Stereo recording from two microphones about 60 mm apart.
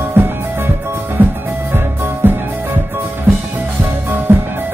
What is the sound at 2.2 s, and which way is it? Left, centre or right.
Music, right.